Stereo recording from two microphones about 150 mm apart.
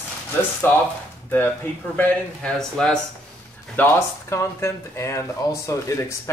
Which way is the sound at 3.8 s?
15° left (ahead or behind).